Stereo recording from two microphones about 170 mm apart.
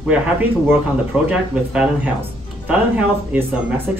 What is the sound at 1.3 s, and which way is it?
Speech, 5° right (ahead or behind).